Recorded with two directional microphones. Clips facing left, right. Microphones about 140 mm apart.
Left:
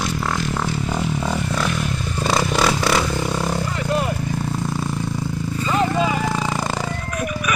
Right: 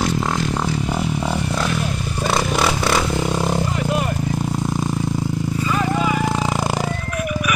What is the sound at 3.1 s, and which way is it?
Vehicle, 15° right (ahead or behind).